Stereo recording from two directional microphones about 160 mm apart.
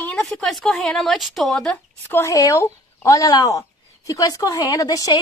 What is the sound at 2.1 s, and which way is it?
Speech, 20° left (ahead or behind).